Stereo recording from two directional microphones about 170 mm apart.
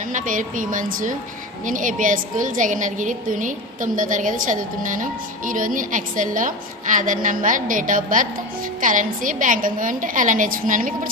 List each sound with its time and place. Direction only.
0.1 s a woman's voice: 50° right (ahead or behind)